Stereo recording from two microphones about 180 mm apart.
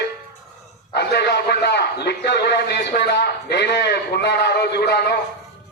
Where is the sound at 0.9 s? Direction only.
70° left (ahead or behind).